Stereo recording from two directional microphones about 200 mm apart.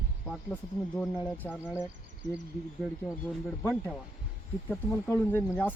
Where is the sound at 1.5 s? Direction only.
5° right (ahead or behind).